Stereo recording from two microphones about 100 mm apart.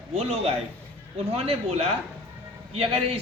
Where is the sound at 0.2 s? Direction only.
90° right.